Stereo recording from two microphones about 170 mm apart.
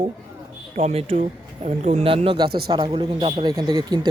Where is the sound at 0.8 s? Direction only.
35° right (ahead or behind).